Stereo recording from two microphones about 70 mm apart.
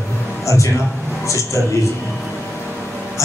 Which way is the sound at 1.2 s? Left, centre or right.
Left.